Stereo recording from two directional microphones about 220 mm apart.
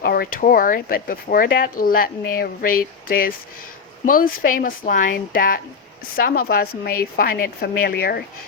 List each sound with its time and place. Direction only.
0.0 s a woman's voice: 45° left (ahead or behind)